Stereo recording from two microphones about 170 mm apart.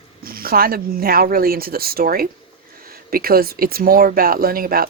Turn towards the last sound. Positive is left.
turn(degrees=-60)  # may be behind; listen again after turning